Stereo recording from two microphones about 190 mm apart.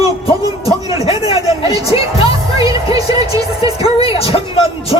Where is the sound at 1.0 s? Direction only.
30° left (ahead or behind).